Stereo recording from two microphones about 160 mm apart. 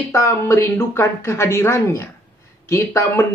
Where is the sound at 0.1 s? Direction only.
15° left (ahead or behind).